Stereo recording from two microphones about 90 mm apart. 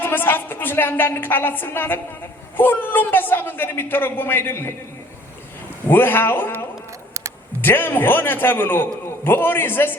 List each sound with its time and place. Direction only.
0.0 s a woman's voice: 25° left (ahead or behind)
5.9 s a woman's voice: 25° left (ahead or behind)